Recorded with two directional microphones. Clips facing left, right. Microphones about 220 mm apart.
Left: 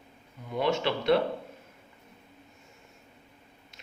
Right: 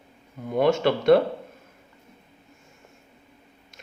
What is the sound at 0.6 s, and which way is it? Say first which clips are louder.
Speech: right 7 dB; 50° right (ahead or behind).